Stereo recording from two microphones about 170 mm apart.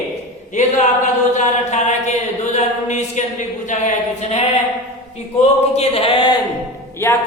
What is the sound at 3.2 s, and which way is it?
Speech, 45° left (ahead or behind).